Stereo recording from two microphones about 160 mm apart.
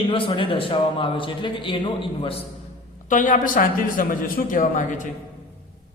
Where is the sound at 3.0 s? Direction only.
55° left (ahead or behind).